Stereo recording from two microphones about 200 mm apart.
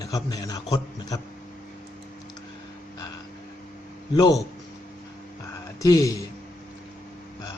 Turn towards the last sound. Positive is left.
turn(degrees=15)  # may be behind; listen again after turning